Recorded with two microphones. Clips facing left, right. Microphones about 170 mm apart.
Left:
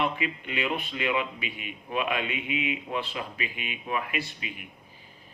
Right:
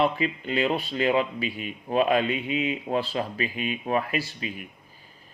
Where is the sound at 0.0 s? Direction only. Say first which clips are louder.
Right 5 dB; 35° right (ahead or behind).